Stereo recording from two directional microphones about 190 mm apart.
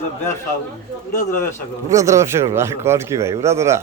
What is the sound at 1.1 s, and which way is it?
Speech, 15° left (ahead or behind).